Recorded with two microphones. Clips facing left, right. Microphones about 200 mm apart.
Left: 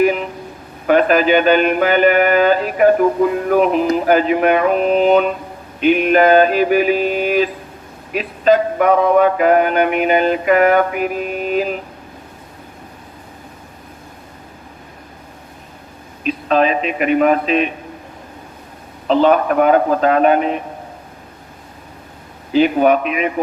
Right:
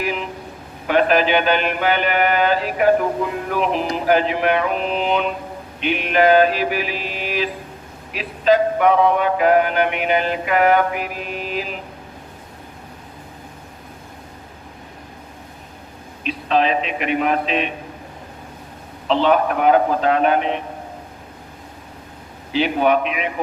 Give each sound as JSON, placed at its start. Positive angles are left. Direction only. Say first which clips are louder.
{"t": 0.9, "sound": "music", "louder": "left 4 dB", "side_deg": 45}
{"t": 16.2, "sound": "music", "louder": "left 4 dB", "side_deg": 45}
{"t": 19.0, "sound": "music", "louder": "left 4 dB", "side_deg": 45}
{"t": 22.5, "sound": "music", "louder": "left 5 dB", "side_deg": 45}